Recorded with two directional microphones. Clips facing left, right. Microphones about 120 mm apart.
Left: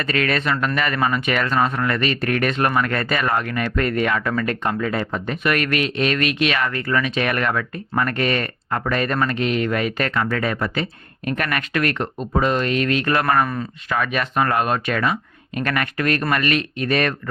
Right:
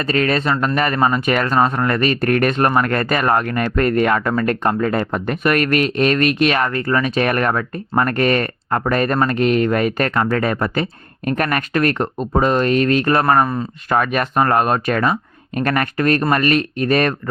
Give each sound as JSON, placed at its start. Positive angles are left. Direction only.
{"t": 0.0, "sound": "speech", "side_deg": -35}
{"t": 13.9, "sound": "speech", "side_deg": -45}